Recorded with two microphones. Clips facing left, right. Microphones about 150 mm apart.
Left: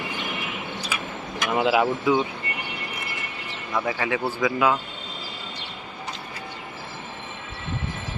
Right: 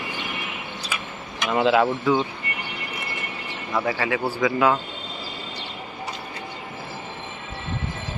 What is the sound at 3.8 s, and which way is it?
Speech, 20° left (ahead or behind).